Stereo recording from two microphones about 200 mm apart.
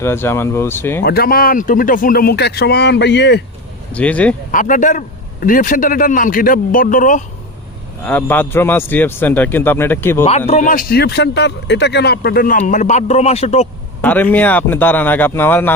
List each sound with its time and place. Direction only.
0.0 s a man's voice: 10° left (ahead or behind)
1.0 s speech: 50° left (ahead or behind)
3.9 s a man's voice: 5° left (ahead or behind)
4.5 s speech: 40° left (ahead or behind)
8.0 s a man's voice: 10° left (ahead or behind)
10.2 s speech: 30° left (ahead or behind)
14.0 s a man's voice: 10° left (ahead or behind)